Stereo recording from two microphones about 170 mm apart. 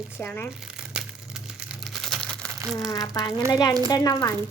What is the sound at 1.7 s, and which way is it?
Crumpling, centre (ahead or behind).